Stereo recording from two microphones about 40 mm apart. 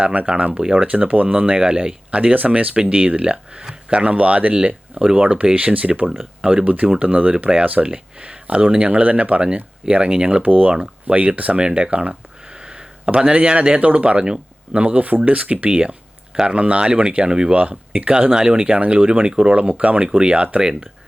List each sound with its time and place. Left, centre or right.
0.0 s speech: right
0.5 s speech: right
6.4 s speech: centre
6.7 s speech: right
8.9 s speech: right
13.3 s speech: right
16.3 s speech: centre
16.6 s speech: right
17.5 s speech: right
18.7 s speech: right
20.6 s speech: right